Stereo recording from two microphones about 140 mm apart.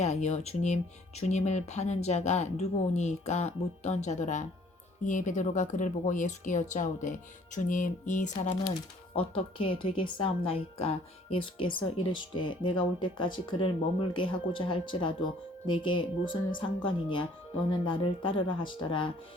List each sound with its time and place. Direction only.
0.0 s speech: 55° left (ahead or behind)
9.1 s a woman's voice: 45° left (ahead or behind)